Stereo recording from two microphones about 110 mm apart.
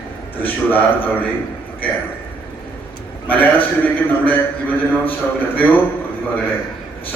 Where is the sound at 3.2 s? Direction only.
15° left (ahead or behind).